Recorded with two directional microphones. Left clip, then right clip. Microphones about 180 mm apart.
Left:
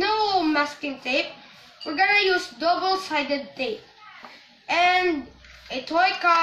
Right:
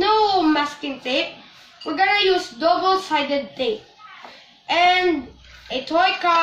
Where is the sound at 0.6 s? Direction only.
Centre (ahead or behind).